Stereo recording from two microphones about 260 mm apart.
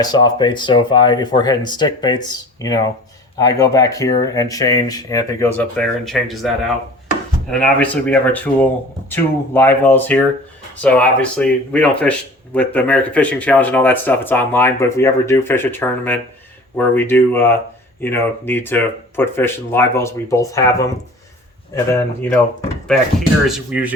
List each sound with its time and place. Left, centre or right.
0.0 s speech: centre
7.5 s speech: centre
21.9 s speech: centre
23.5 s speech: centre